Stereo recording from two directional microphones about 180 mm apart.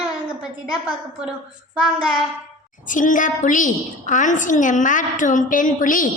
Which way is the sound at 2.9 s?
45° left (ahead or behind).